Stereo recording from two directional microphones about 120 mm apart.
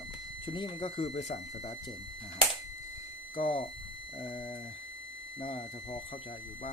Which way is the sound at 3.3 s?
50° left (ahead or behind).